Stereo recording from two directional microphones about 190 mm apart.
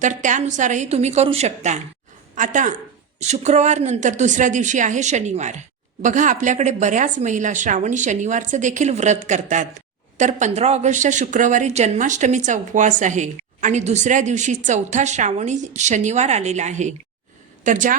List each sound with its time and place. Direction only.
0.0 s a woman's voice: 40° right (ahead or behind)